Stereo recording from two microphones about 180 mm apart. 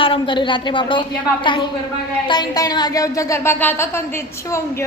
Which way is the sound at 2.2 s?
20° left (ahead or behind).